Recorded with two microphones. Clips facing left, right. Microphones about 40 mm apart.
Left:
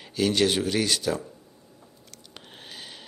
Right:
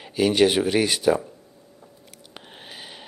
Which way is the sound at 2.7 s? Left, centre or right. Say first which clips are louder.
Right 1 dB; centre.